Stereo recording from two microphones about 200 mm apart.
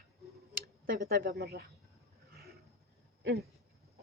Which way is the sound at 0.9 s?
45° right (ahead or behind).